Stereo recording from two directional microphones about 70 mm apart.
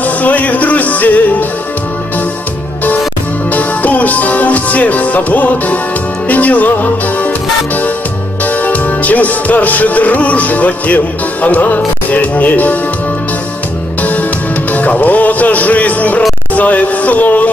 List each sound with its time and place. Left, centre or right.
0.0 s music: left
3.5 s music: left
11.4 s speech: left
14.7 s speech: left